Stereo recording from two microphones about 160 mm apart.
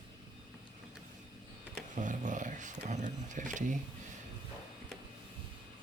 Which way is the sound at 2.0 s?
50° right (ahead or behind).